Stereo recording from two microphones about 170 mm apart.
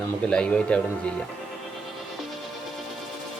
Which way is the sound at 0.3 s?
5° left (ahead or behind).